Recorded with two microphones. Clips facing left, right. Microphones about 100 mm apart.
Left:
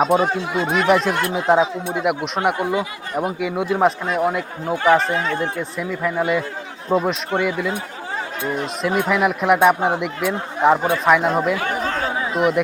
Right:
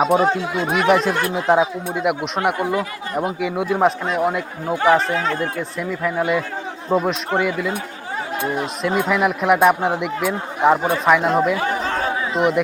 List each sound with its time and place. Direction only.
0.0 s speech: centre (ahead or behind)